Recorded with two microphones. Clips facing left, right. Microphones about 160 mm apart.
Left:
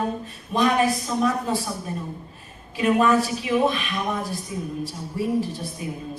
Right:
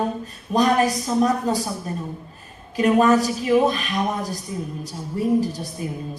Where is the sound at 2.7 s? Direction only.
40° right (ahead or behind).